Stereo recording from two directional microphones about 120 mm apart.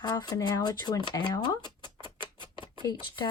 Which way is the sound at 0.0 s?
35° left (ahead or behind).